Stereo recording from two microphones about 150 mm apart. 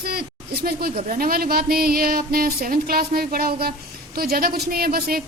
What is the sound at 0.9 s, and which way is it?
A woman's voice, 65° right (ahead or behind).